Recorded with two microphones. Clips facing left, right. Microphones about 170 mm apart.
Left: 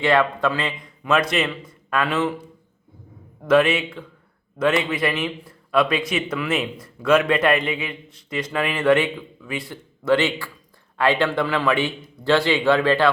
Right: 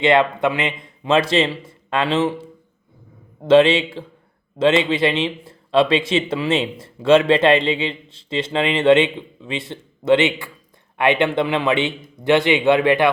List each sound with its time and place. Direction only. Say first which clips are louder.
0.0 s a man's voice: right 3 dB; 20° right (ahead or behind)